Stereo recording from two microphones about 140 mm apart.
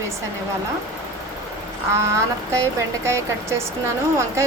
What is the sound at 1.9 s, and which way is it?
Speech, 20° right (ahead or behind).